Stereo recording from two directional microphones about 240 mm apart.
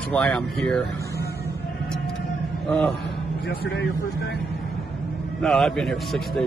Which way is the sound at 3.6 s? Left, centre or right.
Left.